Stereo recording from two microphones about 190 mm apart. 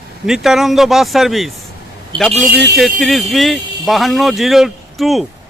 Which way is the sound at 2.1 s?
25° right (ahead or behind).